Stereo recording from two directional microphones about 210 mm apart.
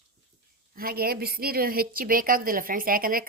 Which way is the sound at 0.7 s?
45° right (ahead or behind).